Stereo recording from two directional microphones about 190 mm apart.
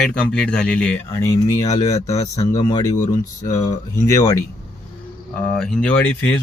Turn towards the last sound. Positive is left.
turn(degrees=10)  # may be behind; listen again after turning